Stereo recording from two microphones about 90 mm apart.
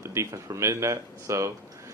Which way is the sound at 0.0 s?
30° right (ahead or behind).